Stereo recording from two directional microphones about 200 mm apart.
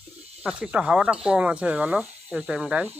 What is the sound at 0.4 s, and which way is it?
Speech, 5° right (ahead or behind).